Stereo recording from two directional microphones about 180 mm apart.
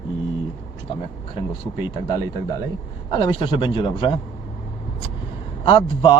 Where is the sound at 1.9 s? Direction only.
25° left (ahead or behind).